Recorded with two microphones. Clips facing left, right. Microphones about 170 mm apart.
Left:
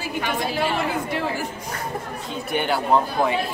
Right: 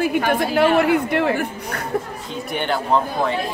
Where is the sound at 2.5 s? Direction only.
5° left (ahead or behind).